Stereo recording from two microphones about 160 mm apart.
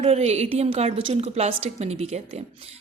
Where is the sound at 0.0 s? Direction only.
40° right (ahead or behind).